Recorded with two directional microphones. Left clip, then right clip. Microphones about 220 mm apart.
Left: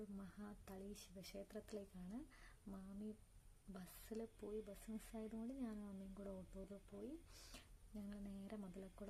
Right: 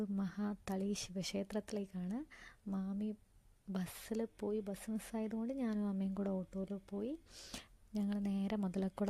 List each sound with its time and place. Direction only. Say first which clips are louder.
0.2 s speech: right 15 dB; 40° right (ahead or behind)